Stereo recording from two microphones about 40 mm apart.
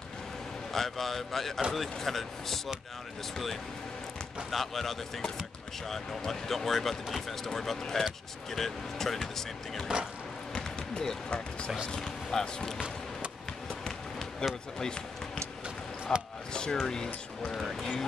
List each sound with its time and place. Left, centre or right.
0.7 s speech: centre
4.5 s speech: centre
9.9 s speech: right
10.5 s basketball bounce: centre
11.2 s speech: left
11.9 s speech: centre
14.4 s speech: left
14.8 s basketball bounce: centre
16.1 s speech: centre